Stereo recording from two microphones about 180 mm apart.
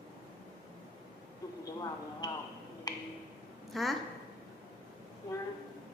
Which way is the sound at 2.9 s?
20° left (ahead or behind).